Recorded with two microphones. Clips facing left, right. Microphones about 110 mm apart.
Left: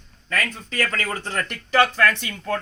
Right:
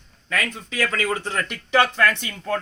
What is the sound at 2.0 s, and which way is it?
Speech, 25° right (ahead or behind).